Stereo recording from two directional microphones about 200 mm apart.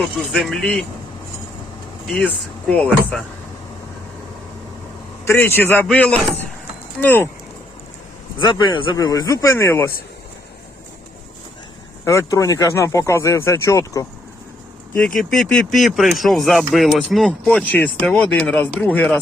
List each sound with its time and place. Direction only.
0.3 s speech: centre (ahead or behind)
2.0 s speech: centre (ahead or behind)
5.2 s speech: 10° left (ahead or behind)
8.4 s speech: 25° left (ahead or behind)
12.0 s speech: 15° left (ahead or behind)
14.9 s speech: centre (ahead or behind)